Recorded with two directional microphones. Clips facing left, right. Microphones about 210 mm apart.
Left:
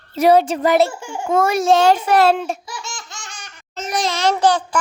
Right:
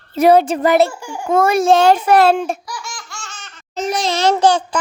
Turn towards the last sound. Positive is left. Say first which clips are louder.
# right 3 dB
turn(degrees=-25)  # may be behind; listen again after turning